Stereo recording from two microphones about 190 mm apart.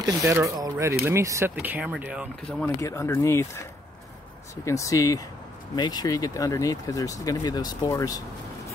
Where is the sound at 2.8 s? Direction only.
15° left (ahead or behind).